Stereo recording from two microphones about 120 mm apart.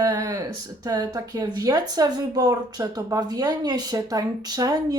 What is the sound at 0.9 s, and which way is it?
A woman's voice, 35° right (ahead or behind).